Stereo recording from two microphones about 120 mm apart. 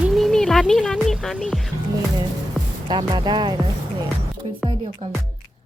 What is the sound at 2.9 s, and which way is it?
Speech, 40° right (ahead or behind).